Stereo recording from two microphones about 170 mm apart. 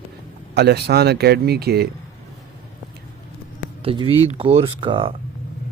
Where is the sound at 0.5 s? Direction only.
75° right (ahead or behind).